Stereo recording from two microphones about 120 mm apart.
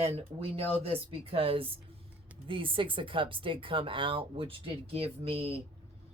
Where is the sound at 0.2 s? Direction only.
55° right (ahead or behind).